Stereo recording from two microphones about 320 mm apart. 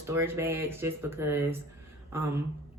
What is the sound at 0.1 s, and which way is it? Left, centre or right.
Speech, centre.